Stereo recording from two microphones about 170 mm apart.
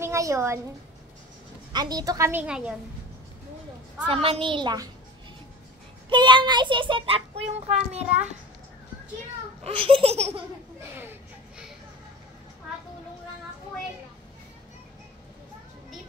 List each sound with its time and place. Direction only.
0.0 s a woman's voice: 15° right (ahead or behind)
1.7 s a child's voice: 25° right (ahead or behind)
2.4 s a woman's voice: 5° right (ahead or behind)
4.1 s a child's voice: 35° right (ahead or behind)
6.0 s a child's voice: 30° right (ahead or behind)
9.6 s laughter: 30° right (ahead or behind)